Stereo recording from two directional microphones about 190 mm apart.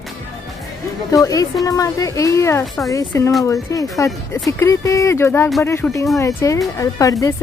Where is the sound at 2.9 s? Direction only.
20° left (ahead or behind).